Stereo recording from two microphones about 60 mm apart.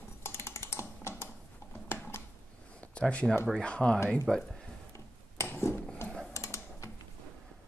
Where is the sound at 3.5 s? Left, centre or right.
Centre.